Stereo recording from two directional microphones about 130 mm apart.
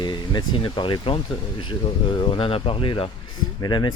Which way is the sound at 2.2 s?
45° left (ahead or behind).